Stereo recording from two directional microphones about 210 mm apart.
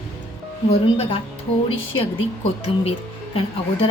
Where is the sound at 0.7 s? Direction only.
30° left (ahead or behind).